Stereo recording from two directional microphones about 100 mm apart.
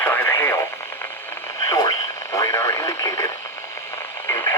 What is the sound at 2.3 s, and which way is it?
Radio, 30° left (ahead or behind).